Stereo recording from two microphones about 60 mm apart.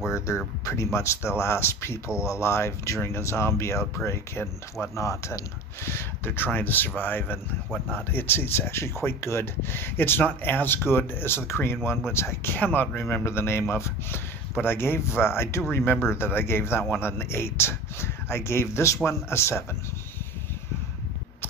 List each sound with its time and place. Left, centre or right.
0.9 s speech: left
5.9 s speech: left
12.5 s speech: left
13.2 s speech: left